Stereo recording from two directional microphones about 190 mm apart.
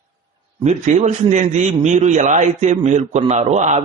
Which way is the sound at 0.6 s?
35° right (ahead or behind).